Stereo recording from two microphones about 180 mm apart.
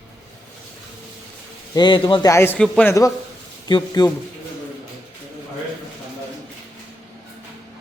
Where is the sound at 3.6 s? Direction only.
25° left (ahead or behind).